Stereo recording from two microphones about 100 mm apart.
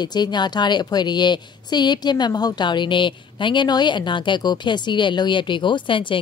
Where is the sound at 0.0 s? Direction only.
45° left (ahead or behind).